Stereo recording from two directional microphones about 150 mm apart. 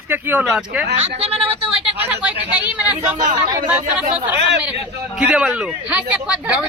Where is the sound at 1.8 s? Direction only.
15° right (ahead or behind).